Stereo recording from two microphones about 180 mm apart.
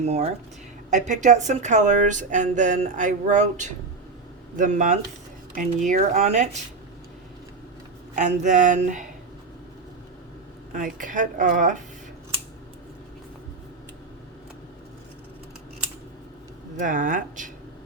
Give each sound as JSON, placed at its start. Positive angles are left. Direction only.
{"t": 0.0, "sound": "speech", "side_deg": -35}
{"t": 8.1, "sound": "speech", "side_deg": -40}
{"t": 10.7, "sound": "speech", "side_deg": -45}
{"t": 16.7, "sound": "speech", "side_deg": -45}